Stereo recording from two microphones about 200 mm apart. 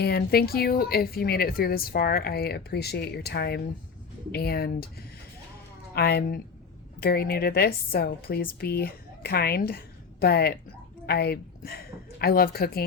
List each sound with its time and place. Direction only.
0.0 s a woman's voice: 50° left (ahead or behind)